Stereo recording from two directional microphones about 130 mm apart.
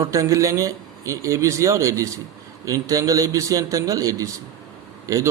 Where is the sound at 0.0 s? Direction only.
25° right (ahead or behind).